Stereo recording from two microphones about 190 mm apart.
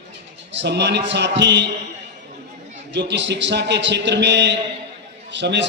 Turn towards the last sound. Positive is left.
turn(degrees=-65)  # may be behind; listen again after turning